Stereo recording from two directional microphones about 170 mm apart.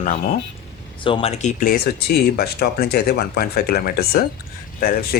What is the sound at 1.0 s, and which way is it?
Speech, 35° left (ahead or behind).